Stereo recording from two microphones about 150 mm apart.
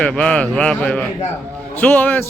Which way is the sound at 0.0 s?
5° left (ahead or behind).